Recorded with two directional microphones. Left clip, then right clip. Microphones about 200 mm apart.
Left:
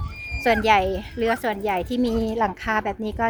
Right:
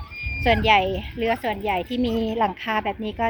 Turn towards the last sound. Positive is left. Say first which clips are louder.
# even
turn(degrees=0)  # may be behind; listen again after turning